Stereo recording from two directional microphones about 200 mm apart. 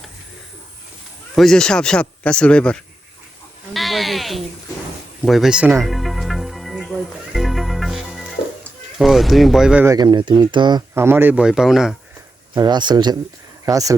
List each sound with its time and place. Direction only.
1.4 s speech: 5° left (ahead or behind)
3.8 s sheep: centre (ahead or behind)
5.2 s music: centre (ahead or behind)
9.0 s speech: centre (ahead or behind)
12.5 s speech: 20° right (ahead or behind)